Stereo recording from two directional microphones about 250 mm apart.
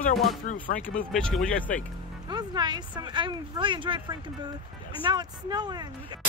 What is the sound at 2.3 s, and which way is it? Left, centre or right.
Speech, centre.